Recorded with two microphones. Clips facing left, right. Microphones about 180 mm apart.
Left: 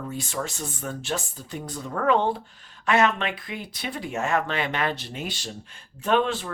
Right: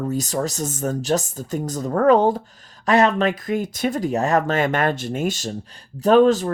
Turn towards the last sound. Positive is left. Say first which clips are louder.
# right 9 dB
turn(degrees=-40)  # may be behind; listen again after turning